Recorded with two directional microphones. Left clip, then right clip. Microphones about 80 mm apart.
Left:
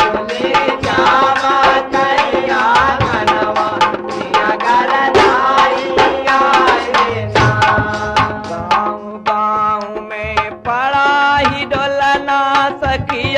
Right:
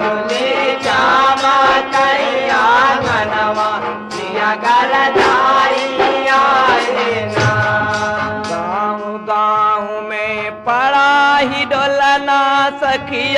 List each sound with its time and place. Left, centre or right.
0.4 s music: right
9.3 s music: right